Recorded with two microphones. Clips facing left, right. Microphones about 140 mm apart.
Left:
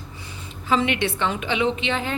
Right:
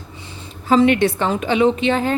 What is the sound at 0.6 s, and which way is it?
A woman's voice, 40° right (ahead or behind).